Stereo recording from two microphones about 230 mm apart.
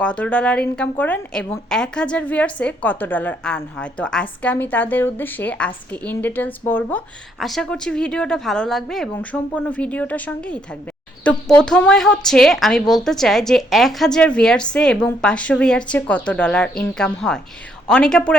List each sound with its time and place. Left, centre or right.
0.0 s a woman's voice: centre